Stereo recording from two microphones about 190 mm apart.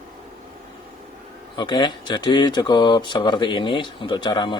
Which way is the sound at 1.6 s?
25° left (ahead or behind).